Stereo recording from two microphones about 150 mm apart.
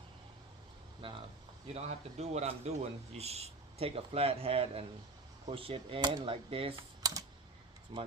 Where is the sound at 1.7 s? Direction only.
45° right (ahead or behind).